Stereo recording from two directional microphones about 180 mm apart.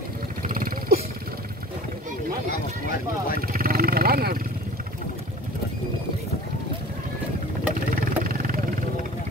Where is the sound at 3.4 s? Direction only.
55° right (ahead or behind).